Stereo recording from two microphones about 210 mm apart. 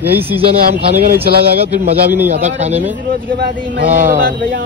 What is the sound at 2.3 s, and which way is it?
Speech, 30° right (ahead or behind).